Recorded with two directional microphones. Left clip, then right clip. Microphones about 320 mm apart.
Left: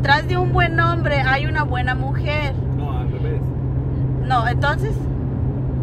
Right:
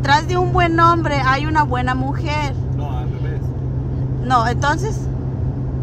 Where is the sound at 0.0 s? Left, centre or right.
Right.